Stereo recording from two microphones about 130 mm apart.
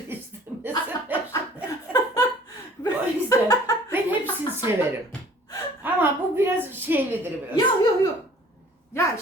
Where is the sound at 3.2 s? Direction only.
25° left (ahead or behind).